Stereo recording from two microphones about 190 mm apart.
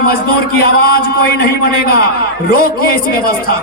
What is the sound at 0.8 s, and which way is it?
A man's voice, 55° left (ahead or behind).